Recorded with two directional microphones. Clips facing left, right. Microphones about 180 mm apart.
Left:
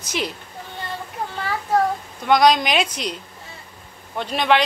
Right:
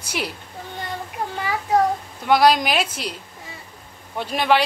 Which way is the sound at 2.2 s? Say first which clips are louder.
Even; 5° right (ahead or behind).